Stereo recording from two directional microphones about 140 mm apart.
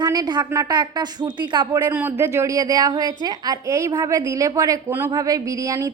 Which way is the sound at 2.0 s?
15° right (ahead or behind).